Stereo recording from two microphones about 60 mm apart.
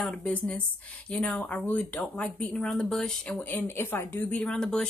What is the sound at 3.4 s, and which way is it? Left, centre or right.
Speech, left.